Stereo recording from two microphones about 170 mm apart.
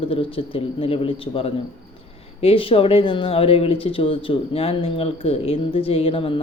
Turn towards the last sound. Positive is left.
turn(degrees=30)  # may be behind; listen again after turning